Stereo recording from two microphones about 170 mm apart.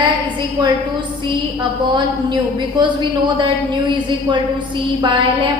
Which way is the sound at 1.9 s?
25° right (ahead or behind).